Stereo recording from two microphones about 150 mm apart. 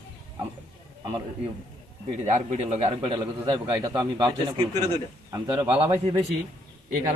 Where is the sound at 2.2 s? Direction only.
45° right (ahead or behind).